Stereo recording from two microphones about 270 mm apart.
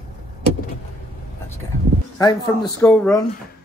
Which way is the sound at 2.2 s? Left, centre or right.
Centre.